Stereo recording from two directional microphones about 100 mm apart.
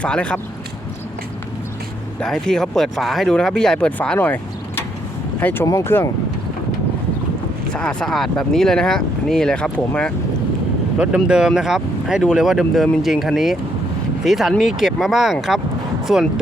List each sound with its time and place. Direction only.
0.0 s speech: 10° left (ahead or behind)
2.2 s speech: 5° left (ahead or behind)
5.4 s speech: 20° left (ahead or behind)
5.6 s speech: 30° left (ahead or behind)
7.7 s speech: 10° left (ahead or behind)
10.9 s speech: 10° right (ahead or behind)